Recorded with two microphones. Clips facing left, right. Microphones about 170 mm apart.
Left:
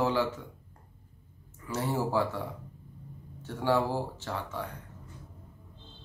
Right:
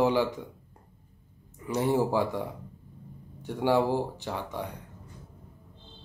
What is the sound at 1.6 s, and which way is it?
Speech, 15° right (ahead or behind).